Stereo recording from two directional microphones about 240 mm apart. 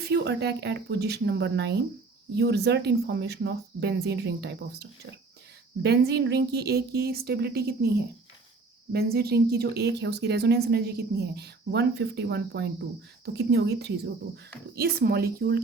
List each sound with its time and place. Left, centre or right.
0.1 s a woman's voice: right